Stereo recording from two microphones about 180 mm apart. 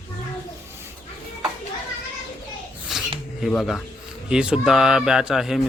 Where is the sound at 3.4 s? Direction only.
Centre (ahead or behind).